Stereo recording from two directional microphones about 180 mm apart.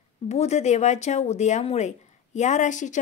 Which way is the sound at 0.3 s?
40° left (ahead or behind).